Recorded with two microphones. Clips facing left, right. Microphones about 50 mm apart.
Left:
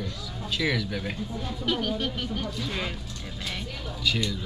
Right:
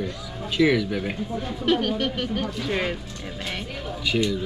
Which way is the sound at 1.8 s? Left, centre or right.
Right.